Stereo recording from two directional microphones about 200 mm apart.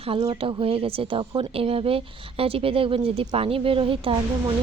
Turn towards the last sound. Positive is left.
turn(degrees=-25)  # may be behind; listen again after turning